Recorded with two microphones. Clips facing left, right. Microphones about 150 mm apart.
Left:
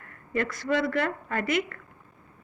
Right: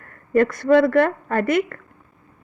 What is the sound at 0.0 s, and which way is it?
A woman's voice, 50° right (ahead or behind).